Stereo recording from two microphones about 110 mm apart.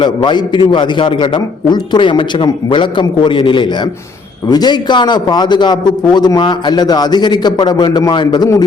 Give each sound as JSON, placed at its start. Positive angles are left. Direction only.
{"t": 0.0, "sound": "a man's voice", "side_deg": 45}